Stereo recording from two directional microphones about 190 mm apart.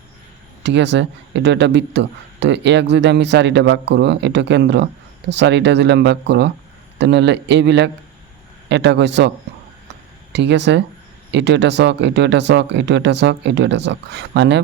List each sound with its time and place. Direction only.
0.6 s speech: 70° right (ahead or behind)
10.3 s speech: 65° right (ahead or behind)